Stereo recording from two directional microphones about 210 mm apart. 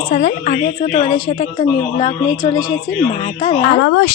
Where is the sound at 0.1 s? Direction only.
30° left (ahead or behind).